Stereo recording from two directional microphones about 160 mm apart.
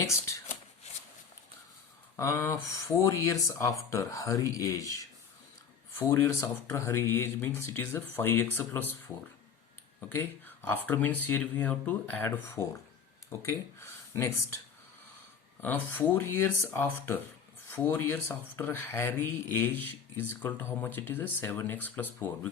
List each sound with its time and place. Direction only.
0.0 s speech: 20° left (ahead or behind)
2.1 s speech: 20° left (ahead or behind)
6.0 s speech: 20° left (ahead or behind)
10.2 s speech: 10° left (ahead or behind)
15.6 s speech: 10° left (ahead or behind)